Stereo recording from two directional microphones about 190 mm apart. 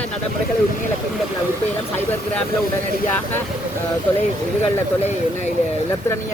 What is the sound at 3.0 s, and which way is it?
Speech, 10° left (ahead or behind).